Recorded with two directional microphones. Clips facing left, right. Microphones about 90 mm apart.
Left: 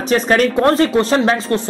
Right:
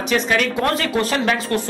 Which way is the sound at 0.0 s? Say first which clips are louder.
Left 5 dB; 35° left (ahead or behind).